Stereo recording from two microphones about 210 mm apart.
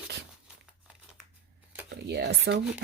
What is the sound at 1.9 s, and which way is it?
Speech, 55° right (ahead or behind).